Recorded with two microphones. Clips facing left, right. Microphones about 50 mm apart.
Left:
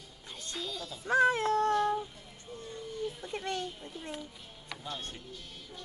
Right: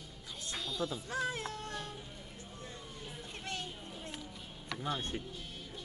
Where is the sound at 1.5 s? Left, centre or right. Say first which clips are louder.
Left 15 dB; left.